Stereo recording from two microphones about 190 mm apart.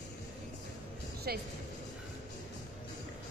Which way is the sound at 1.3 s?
55° right (ahead or behind).